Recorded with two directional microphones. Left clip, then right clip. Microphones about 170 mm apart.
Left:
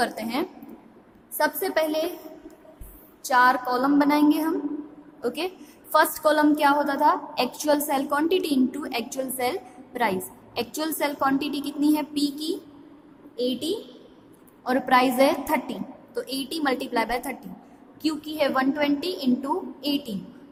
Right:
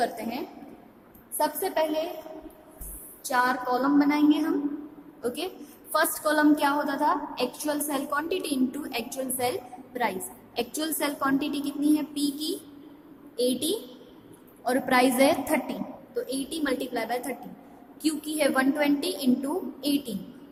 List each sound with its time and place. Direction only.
0.0 s a woman's voice: 35° left (ahead or behind)
3.2 s a woman's voice: 30° left (ahead or behind)
18.0 s a woman's voice: 15° left (ahead or behind)